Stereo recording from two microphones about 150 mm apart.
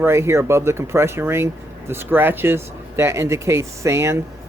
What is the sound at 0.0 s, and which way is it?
Speech, 15° right (ahead or behind).